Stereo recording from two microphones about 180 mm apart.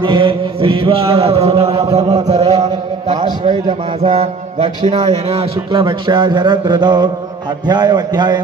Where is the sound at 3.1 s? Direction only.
25° right (ahead or behind).